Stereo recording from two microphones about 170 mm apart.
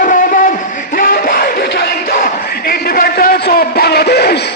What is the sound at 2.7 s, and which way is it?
A man's voice, 60° left (ahead or behind).